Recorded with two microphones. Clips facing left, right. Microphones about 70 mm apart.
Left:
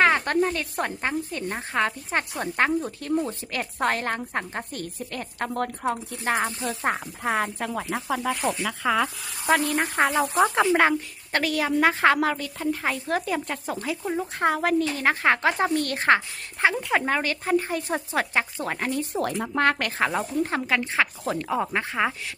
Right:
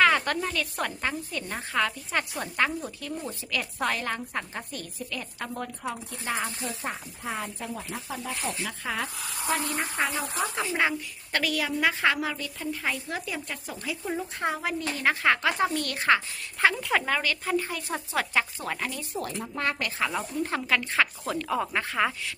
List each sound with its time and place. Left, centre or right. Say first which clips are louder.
0.0 s a sound: left 2 dB; left
0.4 s speech: left 3 dB; left
6.8 s speech: left 12 dB; left
8.1 s speech: left 8 dB; left
9.7 s a woman's voice: left 6 dB; left
10.4 s speech: left 11 dB; left
11.3 s speech: left 4 dB; left
12.1 s a woman's voice: left 7 dB; left
15.0 s speech: even; left
16.9 s speech: left 2 dB; left
19.1 s a woman's voice: left 7 dB; left
20.7 s speech: left 1 dB; left